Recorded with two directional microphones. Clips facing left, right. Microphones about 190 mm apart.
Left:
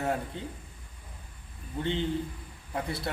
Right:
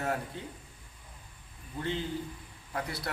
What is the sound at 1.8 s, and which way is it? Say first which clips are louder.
A man's voice: left 4 dB; 25° left (ahead or behind).